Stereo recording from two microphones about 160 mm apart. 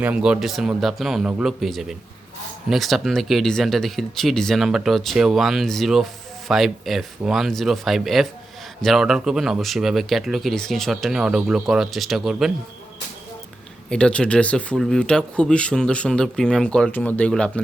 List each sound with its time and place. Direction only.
0.0 s speech: 5° right (ahead or behind)
13.9 s speech: 5° left (ahead or behind)